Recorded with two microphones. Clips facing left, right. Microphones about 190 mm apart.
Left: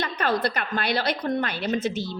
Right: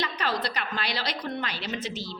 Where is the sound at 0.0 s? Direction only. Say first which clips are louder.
Left 5 dB; 55° left (ahead or behind).